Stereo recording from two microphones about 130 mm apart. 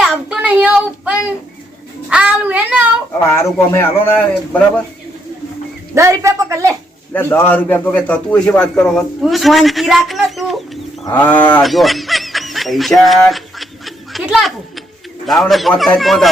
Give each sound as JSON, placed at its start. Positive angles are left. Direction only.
{"t": 0.0, "sound": "child singing", "side_deg": -5}
{"t": 3.3, "sound": "a man's voice", "side_deg": 20}
{"t": 5.9, "sound": "a woman's voice", "side_deg": -20}
{"t": 7.1, "sound": "a man's voice", "side_deg": 20}
{"t": 11.1, "sound": "a man's voice", "side_deg": 15}
{"t": 11.6, "sound": "honk", "side_deg": 0}
{"t": 15.3, "sound": "a man's voice", "side_deg": 0}